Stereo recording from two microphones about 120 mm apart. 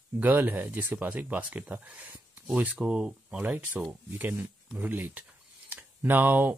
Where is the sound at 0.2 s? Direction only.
15° right (ahead or behind).